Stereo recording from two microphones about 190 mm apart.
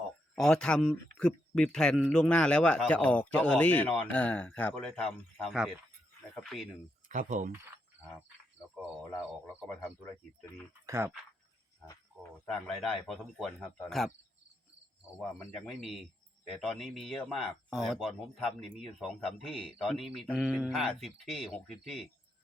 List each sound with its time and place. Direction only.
0.3 s speech: 5° left (ahead or behind)
7.1 s speech: 40° right (ahead or behind)
8.7 s speech: 5° right (ahead or behind)
10.8 s speech: 15° right (ahead or behind)
12.1 s speech: centre (ahead or behind)
15.9 s a man's voice: centre (ahead or behind)